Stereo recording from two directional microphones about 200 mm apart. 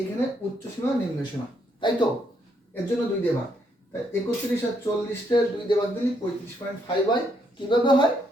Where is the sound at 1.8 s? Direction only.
25° left (ahead or behind).